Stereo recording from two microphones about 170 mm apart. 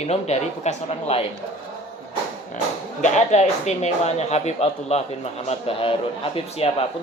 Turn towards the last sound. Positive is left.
turn(degrees=35)  # may be behind; listen again after turning